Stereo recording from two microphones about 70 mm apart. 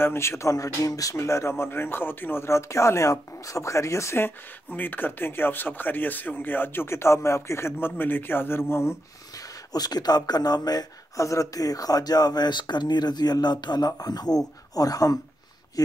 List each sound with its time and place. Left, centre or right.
0.0 s speech: left
1.1 s speech: left
4.6 s speech: left
9.7 s speech: left